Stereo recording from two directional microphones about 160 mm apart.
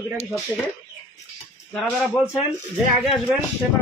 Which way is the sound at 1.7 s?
5° left (ahead or behind).